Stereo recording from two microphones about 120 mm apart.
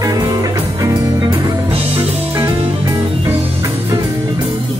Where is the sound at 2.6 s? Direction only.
45° right (ahead or behind).